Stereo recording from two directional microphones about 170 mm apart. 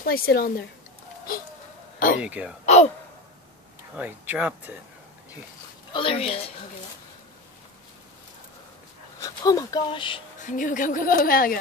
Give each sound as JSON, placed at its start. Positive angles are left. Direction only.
{"t": 0.0, "sound": "a woman's voice", "side_deg": 60}
{"t": 2.1, "sound": "speech", "side_deg": -5}
{"t": 2.6, "sound": "a woman's voice", "side_deg": 40}
{"t": 3.9, "sound": "speech", "side_deg": -10}
{"t": 5.9, "sound": "a woman's voice", "side_deg": 35}
{"t": 9.2, "sound": "speech", "side_deg": 20}
{"t": 10.4, "sound": "a woman's voice", "side_deg": 50}